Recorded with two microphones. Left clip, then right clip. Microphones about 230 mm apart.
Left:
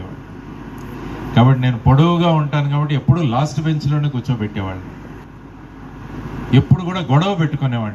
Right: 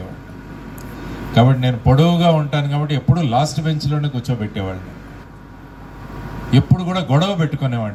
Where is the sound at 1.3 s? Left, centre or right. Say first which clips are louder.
Right 1 dB; right.